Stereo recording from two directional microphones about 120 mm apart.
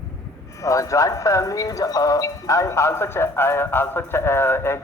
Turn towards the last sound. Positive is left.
turn(degrees=20)  # may be behind; listen again after turning